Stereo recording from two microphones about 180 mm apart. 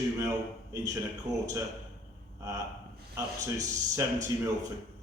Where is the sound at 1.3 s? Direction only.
20° right (ahead or behind).